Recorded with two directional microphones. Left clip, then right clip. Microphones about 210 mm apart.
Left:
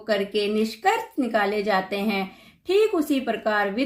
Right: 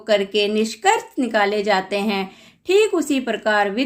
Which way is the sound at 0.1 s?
35° right (ahead or behind).